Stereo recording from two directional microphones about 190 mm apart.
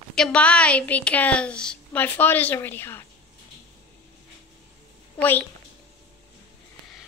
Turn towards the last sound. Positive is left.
turn(degrees=10)  # may be behind; listen again after turning